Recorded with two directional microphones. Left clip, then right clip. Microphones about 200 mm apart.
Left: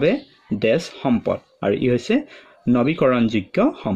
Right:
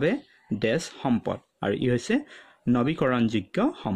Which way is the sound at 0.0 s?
45° right (ahead or behind).